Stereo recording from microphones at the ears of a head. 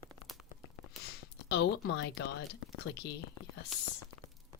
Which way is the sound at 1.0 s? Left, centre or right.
Left.